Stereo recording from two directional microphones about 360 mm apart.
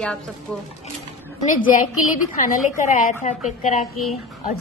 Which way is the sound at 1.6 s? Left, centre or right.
Left.